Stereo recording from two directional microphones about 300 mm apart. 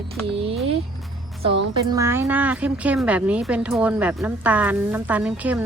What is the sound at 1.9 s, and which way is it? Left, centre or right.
Speech, centre.